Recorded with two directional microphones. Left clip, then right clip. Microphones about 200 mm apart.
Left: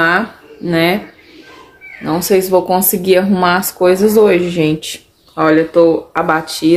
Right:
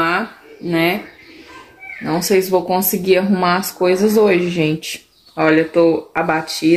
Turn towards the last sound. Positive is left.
turn(degrees=5)  # may be behind; listen again after turning